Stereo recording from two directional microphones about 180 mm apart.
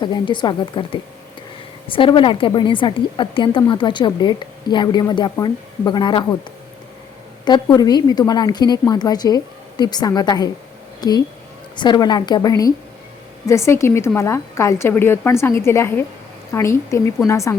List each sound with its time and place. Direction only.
0.0 s a woman's voice: 25° left (ahead or behind)
7.4 s a woman's voice: 25° left (ahead or behind)